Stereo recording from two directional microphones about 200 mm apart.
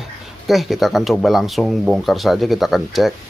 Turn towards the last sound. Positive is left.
turn(degrees=0)  # may be behind; listen again after turning